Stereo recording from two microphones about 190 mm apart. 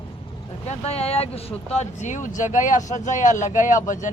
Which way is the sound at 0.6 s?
35° left (ahead or behind).